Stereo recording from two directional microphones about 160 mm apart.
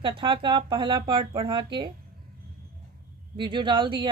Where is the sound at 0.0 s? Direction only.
30° right (ahead or behind).